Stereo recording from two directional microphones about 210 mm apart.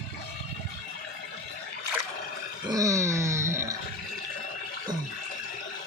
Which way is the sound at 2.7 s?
15° right (ahead or behind).